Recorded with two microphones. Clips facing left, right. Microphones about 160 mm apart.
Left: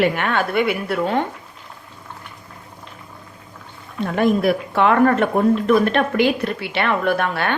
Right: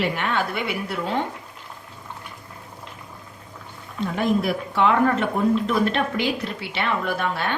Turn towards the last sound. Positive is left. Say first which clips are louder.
# left 5 dB
turn(degrees=65)  # may be behind; listen again after turning